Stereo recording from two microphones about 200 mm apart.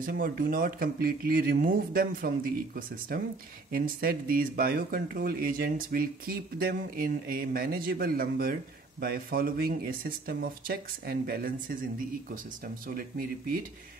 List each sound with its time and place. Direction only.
0.0 s speech: 45° right (ahead or behind)